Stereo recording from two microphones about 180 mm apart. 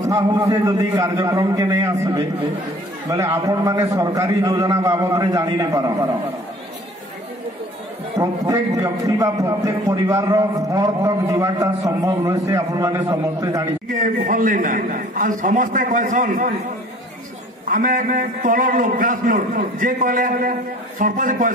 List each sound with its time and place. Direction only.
0.0 s a man's voice: 20° right (ahead or behind)
8.2 s a man's voice: 20° right (ahead or behind)
13.8 s a man's voice: 45° right (ahead or behind)
17.6 s a man's voice: 50° right (ahead or behind)